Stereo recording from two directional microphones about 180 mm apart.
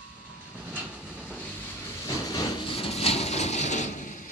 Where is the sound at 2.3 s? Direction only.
30° left (ahead or behind); by 4.3 s 45° left (ahead or behind).